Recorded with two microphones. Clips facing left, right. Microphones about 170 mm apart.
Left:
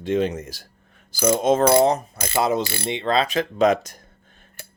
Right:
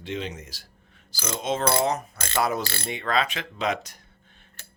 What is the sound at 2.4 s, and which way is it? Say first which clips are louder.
Speech: left 4 dB; 20° left (ahead or behind).